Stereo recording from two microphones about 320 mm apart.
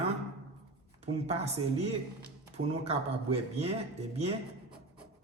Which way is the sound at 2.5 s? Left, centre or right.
Centre.